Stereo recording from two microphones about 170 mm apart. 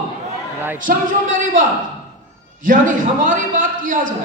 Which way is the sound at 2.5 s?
50° right (ahead or behind).